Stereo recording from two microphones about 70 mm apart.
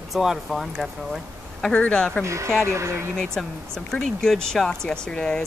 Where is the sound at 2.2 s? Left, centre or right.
Right.